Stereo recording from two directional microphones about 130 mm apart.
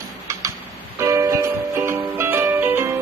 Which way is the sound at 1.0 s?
20° right (ahead or behind).